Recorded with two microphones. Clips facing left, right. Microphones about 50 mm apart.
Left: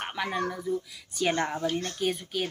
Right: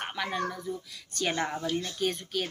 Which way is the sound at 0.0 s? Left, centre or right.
Centre.